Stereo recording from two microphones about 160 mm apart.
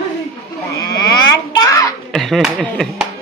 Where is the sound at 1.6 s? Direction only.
20° left (ahead or behind).